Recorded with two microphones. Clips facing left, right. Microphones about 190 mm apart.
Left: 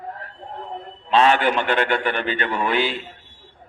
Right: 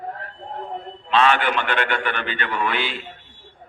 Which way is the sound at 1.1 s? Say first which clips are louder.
Left 2 dB; 40° left (ahead or behind).